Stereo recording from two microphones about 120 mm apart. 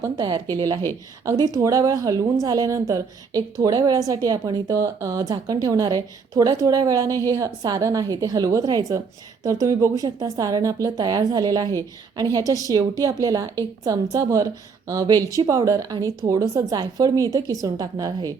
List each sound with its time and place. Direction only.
0.2 s a woman's voice: 35° right (ahead or behind)